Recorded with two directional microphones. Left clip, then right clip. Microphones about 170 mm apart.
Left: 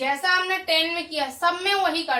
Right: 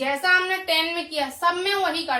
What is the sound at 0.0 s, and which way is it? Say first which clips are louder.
A woman's voice: right 2 dB; 5° right (ahead or behind).